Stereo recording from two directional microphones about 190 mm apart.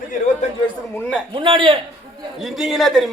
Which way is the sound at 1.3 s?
25° right (ahead or behind).